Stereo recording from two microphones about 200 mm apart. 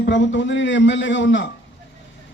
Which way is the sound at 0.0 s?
65° left (ahead or behind).